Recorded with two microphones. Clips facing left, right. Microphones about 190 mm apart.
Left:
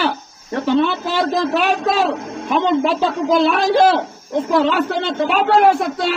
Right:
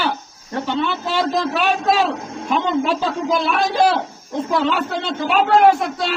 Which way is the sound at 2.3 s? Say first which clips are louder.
Left 2 dB; 65° left (ahead or behind).